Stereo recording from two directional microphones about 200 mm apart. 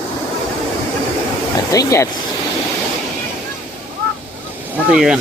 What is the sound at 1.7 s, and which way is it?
Speech, 15° left (ahead or behind).